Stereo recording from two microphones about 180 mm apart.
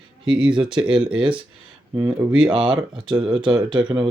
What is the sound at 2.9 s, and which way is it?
Speech, 25° right (ahead or behind).